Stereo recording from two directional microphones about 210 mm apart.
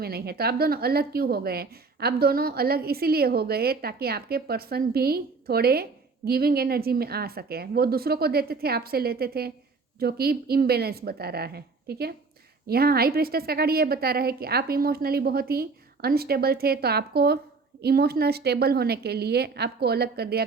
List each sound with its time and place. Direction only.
0.0 s a woman's voice: 50° right (ahead or behind)